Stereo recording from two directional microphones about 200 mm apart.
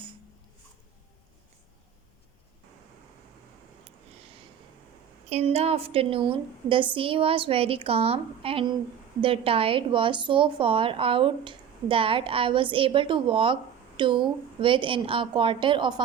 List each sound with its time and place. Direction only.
5.3 s a woman's voice: 30° right (ahead or behind)